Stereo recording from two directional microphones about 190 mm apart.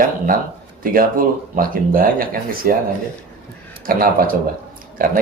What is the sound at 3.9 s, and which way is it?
Speech, 50° right (ahead or behind).